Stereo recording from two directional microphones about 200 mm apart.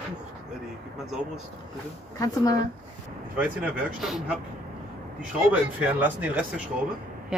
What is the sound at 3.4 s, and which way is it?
Speech, 5° right (ahead or behind).